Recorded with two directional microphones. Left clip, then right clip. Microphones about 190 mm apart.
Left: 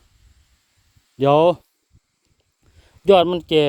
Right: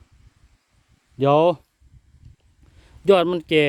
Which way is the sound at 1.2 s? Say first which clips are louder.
Left 2 dB; 5° left (ahead or behind).